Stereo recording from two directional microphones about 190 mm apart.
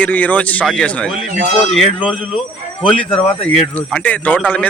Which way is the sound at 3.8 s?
5° left (ahead or behind).